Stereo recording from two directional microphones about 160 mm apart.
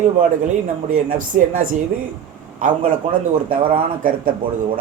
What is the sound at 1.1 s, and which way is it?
Speech, 60° right (ahead or behind).